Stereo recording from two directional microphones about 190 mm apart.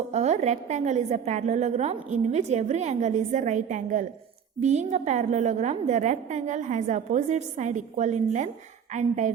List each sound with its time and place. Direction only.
0.1 s a woman's voice: 35° right (ahead or behind)